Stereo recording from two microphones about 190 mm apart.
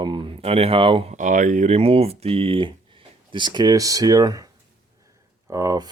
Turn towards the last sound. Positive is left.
turn(degrees=-20)  # may be behind; listen again after turning